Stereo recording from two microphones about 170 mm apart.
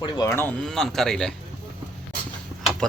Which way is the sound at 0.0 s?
20° left (ahead or behind).